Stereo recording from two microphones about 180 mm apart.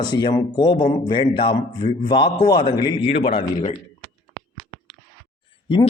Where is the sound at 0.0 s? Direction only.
25° left (ahead or behind).